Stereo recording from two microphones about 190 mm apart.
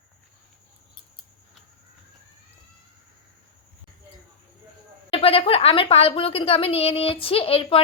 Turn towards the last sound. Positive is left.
turn(degrees=30)  # may be behind; listen again after turning